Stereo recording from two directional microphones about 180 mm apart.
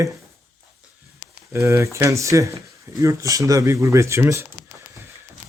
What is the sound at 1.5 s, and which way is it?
A man's voice, 15° right (ahead or behind).